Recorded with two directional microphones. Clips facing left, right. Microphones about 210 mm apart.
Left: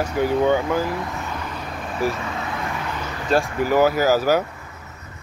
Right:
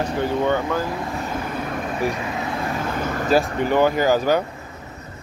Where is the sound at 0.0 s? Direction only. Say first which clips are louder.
Left 2 dB; 10° left (ahead or behind).